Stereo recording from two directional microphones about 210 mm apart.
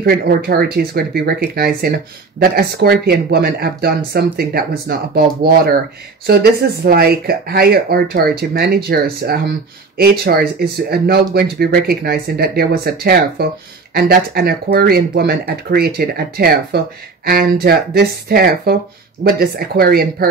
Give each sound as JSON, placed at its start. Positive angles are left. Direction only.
{"t": 0.0, "sound": "speech", "side_deg": -45}